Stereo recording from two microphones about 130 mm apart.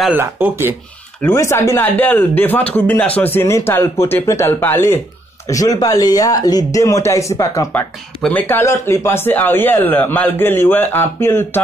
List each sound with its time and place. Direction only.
0.1 s speech: 15° right (ahead or behind)
1.2 s speech: 20° left (ahead or behind)
5.5 s speech: 30° left (ahead or behind)
7.7 s speech: 10° left (ahead or behind)